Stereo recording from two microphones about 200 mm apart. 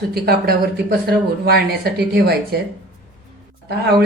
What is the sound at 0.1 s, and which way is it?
Speech, 50° right (ahead or behind).